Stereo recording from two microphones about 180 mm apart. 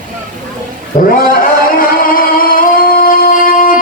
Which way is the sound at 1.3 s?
50° left (ahead or behind).